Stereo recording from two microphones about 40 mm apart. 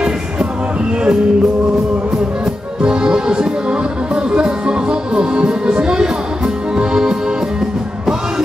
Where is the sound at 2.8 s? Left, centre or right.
Right.